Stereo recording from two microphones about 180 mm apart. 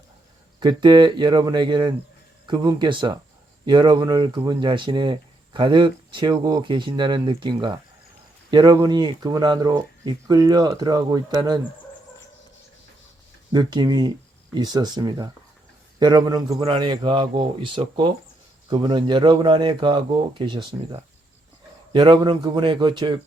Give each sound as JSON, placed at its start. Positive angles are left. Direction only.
{"t": 0.6, "sound": "speech", "side_deg": -25}
{"t": 13.5, "sound": "speech", "side_deg": -25}
{"t": 21.9, "sound": "speech", "side_deg": -25}